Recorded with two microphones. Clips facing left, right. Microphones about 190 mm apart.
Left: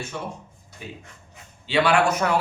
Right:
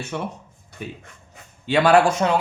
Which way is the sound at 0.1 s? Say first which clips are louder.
Right 6 dB; 60° right (ahead or behind).